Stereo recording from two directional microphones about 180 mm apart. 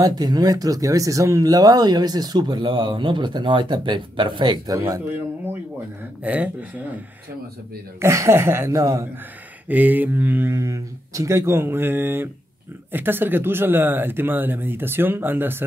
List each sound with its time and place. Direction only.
0.0 s speech: 20° right (ahead or behind)
6.2 s speech: 10° right (ahead or behind)
8.0 s speech: 15° right (ahead or behind)